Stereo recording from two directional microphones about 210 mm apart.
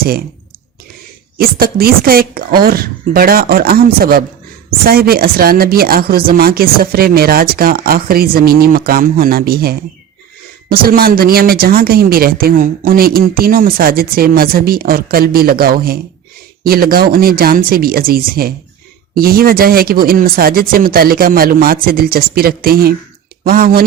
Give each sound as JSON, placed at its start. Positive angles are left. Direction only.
{"t": 0.0, "sound": "speech", "side_deg": -45}
{"t": 1.4, "sound": "speech", "side_deg": -45}